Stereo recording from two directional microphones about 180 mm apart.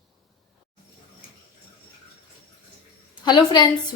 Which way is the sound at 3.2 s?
25° left (ahead or behind).